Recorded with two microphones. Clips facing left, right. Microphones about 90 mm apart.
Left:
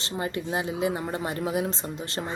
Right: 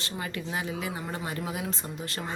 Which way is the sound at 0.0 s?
30° left (ahead or behind).